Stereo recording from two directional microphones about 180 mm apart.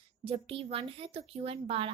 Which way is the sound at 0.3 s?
30° right (ahead or behind).